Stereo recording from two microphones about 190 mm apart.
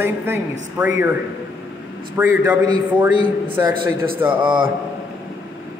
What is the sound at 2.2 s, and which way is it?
Speech, 15° right (ahead or behind).